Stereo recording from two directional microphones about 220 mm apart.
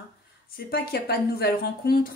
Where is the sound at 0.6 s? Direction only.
45° left (ahead or behind).